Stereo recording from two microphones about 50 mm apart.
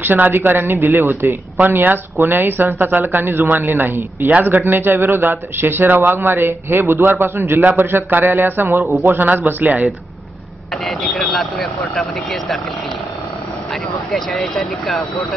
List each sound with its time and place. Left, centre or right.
0.0 s speech: right
0.7 s a man's voice: right
1.6 s a man's voice: right
11.3 s speech: centre
14.1 s speech: centre